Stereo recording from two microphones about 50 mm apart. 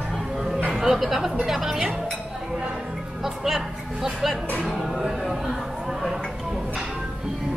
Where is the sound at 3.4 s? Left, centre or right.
Centre.